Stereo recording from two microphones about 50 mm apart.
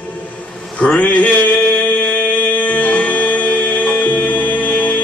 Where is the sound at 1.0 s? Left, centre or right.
Left.